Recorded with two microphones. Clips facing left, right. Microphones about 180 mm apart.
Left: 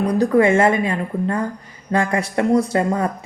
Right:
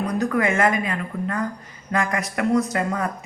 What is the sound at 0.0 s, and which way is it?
A woman's voice, 30° left (ahead or behind).